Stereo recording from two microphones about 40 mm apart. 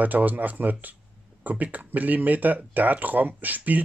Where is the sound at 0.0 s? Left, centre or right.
Right.